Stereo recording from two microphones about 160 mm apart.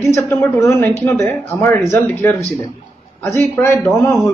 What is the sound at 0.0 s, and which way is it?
Speech, 15° left (ahead or behind).